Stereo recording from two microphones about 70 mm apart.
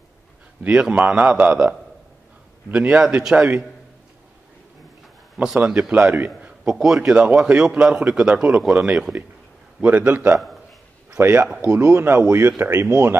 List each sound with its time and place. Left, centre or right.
0.7 s speech: centre
2.7 s speech: centre
5.7 s a man's voice: centre
6.6 s speech: centre
7.2 s a man's voice: centre
11.1 s speech: right